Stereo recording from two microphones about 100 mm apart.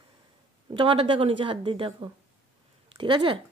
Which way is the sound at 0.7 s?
60° right (ahead or behind).